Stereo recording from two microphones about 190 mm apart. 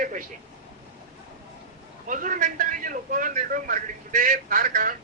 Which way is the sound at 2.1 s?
45° right (ahead or behind).